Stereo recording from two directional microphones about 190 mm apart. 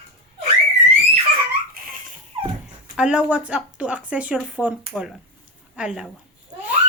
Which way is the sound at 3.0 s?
5° right (ahead or behind).